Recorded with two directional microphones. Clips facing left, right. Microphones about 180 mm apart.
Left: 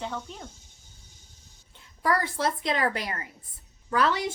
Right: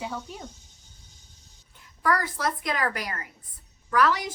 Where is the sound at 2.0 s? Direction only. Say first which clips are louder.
Even; 25° left (ahead or behind).